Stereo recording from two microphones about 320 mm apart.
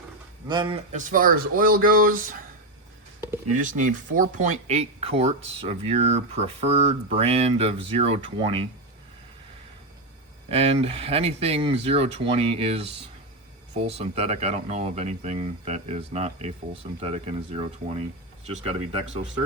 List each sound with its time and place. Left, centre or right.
0.4 s speech: centre
3.5 s speech: right
10.5 s speech: centre
14.0 s speech: centre